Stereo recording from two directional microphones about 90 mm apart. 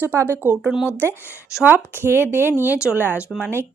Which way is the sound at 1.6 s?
20° right (ahead or behind).